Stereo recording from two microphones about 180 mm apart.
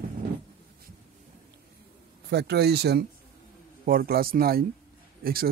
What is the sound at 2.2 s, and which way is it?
Speech, 65° right (ahead or behind).